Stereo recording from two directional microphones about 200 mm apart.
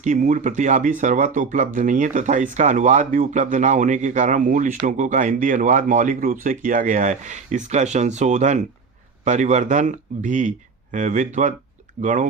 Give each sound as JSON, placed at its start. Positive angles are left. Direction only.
{"t": 0.0, "sound": "speech", "side_deg": -40}